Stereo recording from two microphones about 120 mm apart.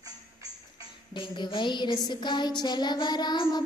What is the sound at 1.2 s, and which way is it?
Child singing, 45° left (ahead or behind).